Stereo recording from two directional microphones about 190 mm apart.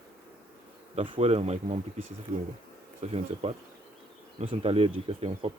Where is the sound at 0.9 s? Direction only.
30° right (ahead or behind).